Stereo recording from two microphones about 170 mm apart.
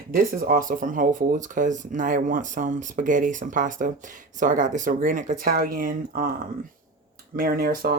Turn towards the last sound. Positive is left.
turn(degrees=-60)  # may be behind; listen again after turning